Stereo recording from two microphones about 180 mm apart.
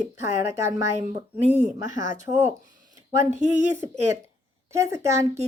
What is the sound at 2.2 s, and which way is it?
Speech, 10° right (ahead or behind).